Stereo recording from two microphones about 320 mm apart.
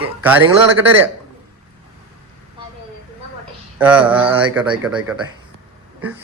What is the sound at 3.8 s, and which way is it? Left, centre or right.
Speech, centre.